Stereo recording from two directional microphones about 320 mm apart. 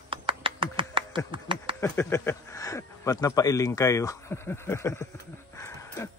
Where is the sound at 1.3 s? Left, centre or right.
Centre.